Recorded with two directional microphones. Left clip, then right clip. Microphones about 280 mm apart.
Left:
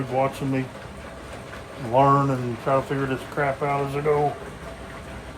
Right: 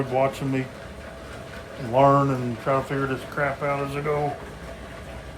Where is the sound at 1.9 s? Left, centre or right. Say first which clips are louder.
Even; centre.